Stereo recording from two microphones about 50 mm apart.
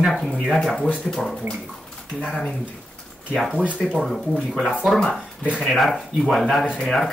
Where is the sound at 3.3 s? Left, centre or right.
Centre.